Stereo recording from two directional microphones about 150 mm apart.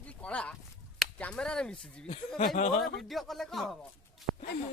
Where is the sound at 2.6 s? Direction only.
70° left (ahead or behind).